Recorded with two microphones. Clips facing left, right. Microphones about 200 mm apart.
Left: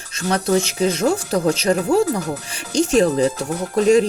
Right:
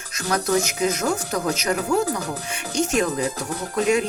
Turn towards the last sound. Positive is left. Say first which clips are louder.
# left 6 dB
turn(degrees=35)  # may be behind; listen again after turning